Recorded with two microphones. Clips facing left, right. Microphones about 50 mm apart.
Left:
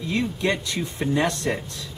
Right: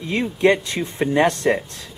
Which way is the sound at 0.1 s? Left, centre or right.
Right.